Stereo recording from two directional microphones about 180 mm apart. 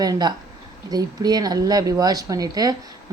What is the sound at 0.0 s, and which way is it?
A woman's voice, 20° right (ahead or behind).